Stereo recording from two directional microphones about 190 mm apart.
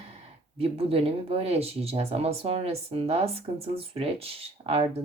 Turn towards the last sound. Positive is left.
turn(degrees=-30)  # may be behind; listen again after turning